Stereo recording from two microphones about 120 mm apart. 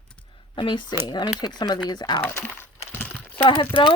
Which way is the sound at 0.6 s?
45° left (ahead or behind).